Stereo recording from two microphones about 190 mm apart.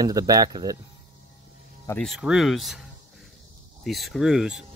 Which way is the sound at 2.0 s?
5° right (ahead or behind).